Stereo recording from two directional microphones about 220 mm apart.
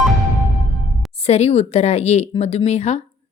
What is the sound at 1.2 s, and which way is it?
A woman's voice, 30° left (ahead or behind).